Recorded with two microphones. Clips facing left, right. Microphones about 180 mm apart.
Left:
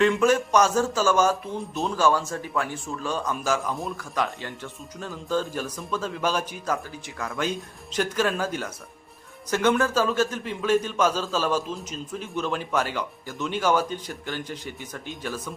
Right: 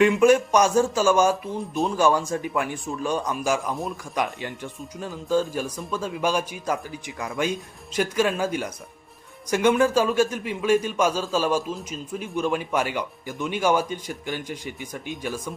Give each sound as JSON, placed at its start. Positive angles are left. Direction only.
{"t": 0.0, "sound": "a man's voice", "side_deg": -10}